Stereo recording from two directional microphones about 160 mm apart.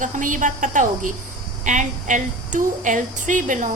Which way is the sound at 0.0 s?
55° right (ahead or behind).